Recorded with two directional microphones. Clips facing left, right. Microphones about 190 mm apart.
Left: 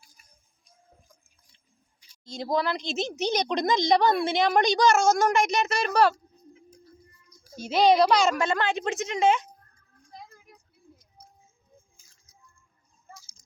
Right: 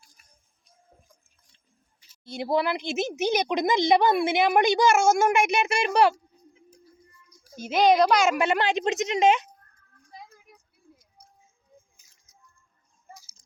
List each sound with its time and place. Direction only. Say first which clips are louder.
0.6 s music: even; centre (ahead or behind)
2.4 s speech: right 2 dB; 10° right (ahead or behind)
7.4 s speech: even; centre (ahead or behind); by 9.4 s 20° right (ahead or behind)
10.1 s a sound: even; 5° right (ahead or behind)
11.9 s music: left 3 dB; 20° right (ahead or behind)